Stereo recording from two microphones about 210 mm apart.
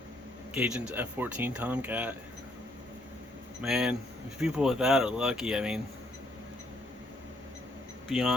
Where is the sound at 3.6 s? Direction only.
Centre (ahead or behind).